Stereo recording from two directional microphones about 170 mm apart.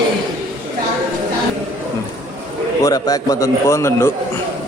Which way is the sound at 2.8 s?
20° left (ahead or behind).